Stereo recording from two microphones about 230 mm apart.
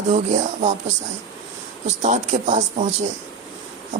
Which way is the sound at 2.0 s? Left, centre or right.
Right.